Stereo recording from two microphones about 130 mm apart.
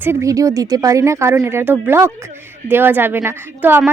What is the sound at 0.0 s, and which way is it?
A woman's voice, 20° right (ahead or behind).